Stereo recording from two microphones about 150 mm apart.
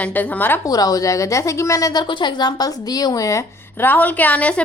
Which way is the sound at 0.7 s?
25° left (ahead or behind).